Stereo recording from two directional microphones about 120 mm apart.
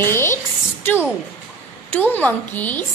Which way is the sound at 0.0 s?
20° left (ahead or behind).